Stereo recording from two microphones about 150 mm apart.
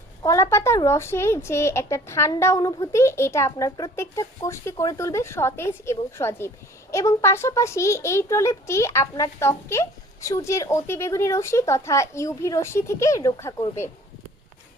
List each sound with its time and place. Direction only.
0.2 s a woman's voice: 20° left (ahead or behind)